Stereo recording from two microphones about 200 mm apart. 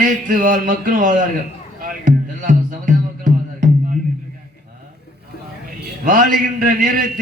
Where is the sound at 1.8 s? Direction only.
45° right (ahead or behind).